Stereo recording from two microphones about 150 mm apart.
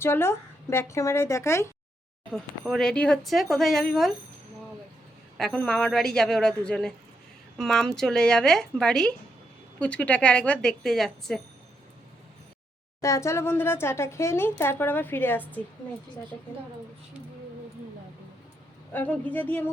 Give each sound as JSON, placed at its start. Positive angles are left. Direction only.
{"t": 0.0, "sound": "speech", "side_deg": 15}
{"t": 2.3, "sound": "speech", "side_deg": 5}
{"t": 5.4, "sound": "speech", "side_deg": 5}
{"t": 13.0, "sound": "speech", "side_deg": 20}
{"t": 18.9, "sound": "speech", "side_deg": 10}